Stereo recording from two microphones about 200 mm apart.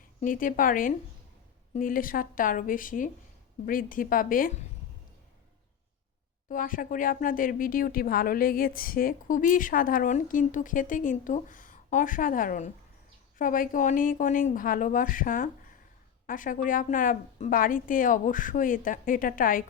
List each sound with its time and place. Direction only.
0.2 s speech: 45° left (ahead or behind)
6.5 s speech: 45° left (ahead or behind)